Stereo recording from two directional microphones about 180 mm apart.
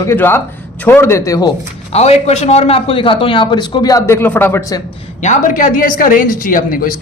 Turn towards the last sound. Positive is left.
turn(degrees=50)  # may be behind; listen again after turning